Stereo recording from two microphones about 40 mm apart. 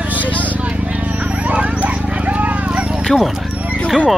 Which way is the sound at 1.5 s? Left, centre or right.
Right.